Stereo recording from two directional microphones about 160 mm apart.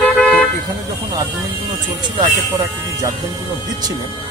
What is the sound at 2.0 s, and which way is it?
Speech, 30° right (ahead or behind).